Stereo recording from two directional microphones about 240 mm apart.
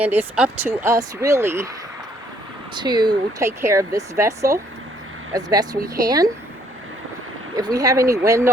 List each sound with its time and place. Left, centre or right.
0.0 s speech: centre
2.7 s speech: centre
7.5 s speech: centre